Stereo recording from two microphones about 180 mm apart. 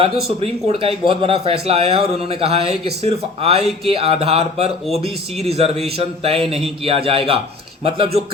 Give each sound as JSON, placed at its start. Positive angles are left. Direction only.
{"t": 0.3, "sound": "speech", "side_deg": -35}